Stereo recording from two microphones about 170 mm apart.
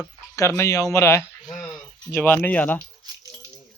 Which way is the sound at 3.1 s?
25° right (ahead or behind).